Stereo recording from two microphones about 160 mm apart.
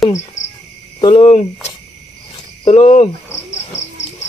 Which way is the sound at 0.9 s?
30° left (ahead or behind).